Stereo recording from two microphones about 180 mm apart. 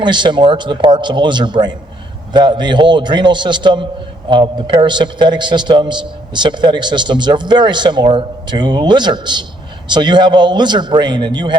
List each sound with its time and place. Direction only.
0.0 s a man's voice: 25° right (ahead or behind)